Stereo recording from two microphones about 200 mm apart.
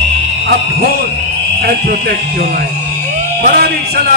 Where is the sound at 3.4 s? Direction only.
45° right (ahead or behind).